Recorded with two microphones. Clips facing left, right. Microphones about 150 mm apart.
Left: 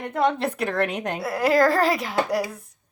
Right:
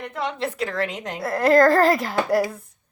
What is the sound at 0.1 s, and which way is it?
A woman's voice, 50° left (ahead or behind).